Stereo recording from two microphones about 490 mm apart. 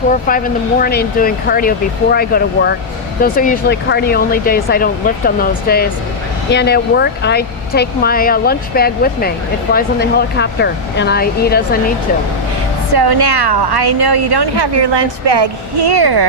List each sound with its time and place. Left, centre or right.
0.1 s speech: centre
12.9 s a woman's voice: right